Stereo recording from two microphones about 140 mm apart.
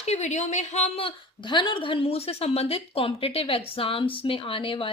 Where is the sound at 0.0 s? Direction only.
55° left (ahead or behind).